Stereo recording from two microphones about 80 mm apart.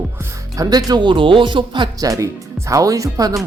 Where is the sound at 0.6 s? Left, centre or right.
Right.